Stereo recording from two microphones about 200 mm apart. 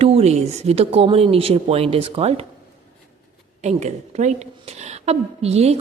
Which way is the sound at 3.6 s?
35° right (ahead or behind).